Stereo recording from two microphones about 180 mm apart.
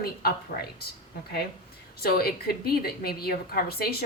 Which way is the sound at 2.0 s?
60° left (ahead or behind).